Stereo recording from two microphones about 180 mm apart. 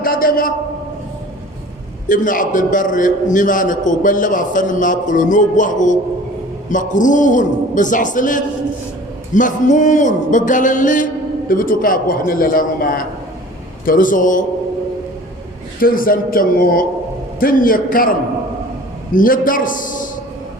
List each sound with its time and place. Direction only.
0.0 s a sound: 55° left (ahead or behind)
2.0 s a man's voice: 45° left (ahead or behind)
15.8 s a man's voice: 50° left (ahead or behind)
19.1 s a man's voice: 50° left (ahead or behind)